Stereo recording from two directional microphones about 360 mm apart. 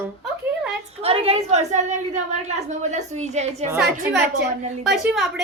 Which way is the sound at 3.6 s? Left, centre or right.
Centre.